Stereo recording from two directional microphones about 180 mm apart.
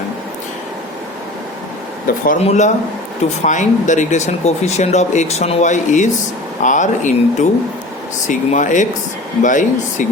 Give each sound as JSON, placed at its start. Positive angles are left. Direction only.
{"t": 2.4, "sound": "speech", "side_deg": 40}